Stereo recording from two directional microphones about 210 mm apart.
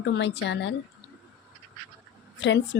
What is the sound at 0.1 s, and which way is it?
Speech, 55° left (ahead or behind).